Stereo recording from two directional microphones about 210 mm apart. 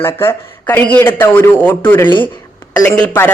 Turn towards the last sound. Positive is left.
turn(degrees=10)  # may be behind; listen again after turning